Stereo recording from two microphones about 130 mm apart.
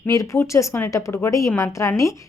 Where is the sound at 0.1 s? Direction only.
25° left (ahead or behind).